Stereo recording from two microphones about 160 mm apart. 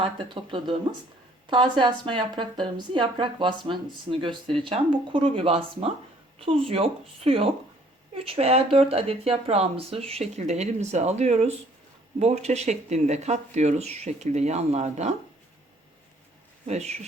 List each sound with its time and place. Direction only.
0.0 s a woman's voice: 30° right (ahead or behind)
16.6 s speech: 45° right (ahead or behind)